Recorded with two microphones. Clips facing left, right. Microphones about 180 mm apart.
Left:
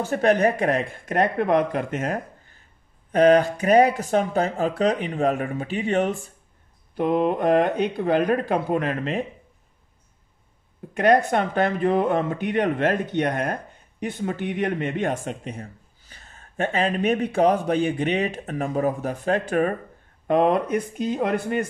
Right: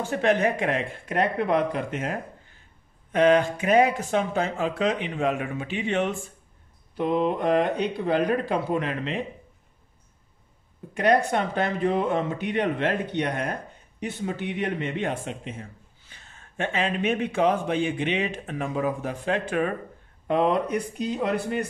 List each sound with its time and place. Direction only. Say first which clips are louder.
0.0 s speech: left 3 dB; 40° left (ahead or behind)
7.0 s speech: left 3 dB; 55° left (ahead or behind)
11.0 s speech: left 3 dB; 50° left (ahead or behind)